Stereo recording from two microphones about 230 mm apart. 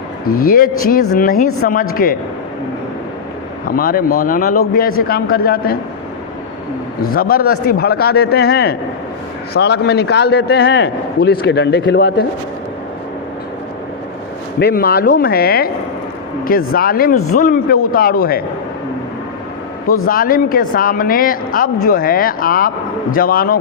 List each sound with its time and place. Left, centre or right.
0.3 s a man's voice: left
3.7 s a man's voice: left
7.0 s a man's voice: left
14.6 s a man's voice: left
17.2 s speech: left
17.4 s a man's voice: left
20.1 s a man's voice: left